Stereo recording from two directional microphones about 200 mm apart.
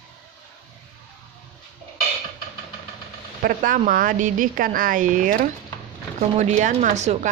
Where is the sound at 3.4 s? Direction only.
45° right (ahead or behind).